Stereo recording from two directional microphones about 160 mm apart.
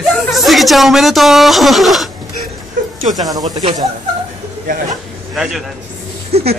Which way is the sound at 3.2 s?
25° right (ahead or behind).